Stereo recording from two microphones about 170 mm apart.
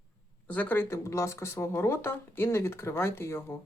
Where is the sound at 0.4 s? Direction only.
10° left (ahead or behind).